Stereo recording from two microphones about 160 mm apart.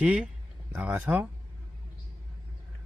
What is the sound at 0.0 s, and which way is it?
Speech, 5° right (ahead or behind).